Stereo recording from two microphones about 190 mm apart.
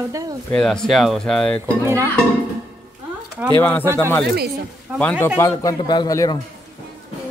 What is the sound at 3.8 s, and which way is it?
Speech, 15° right (ahead or behind).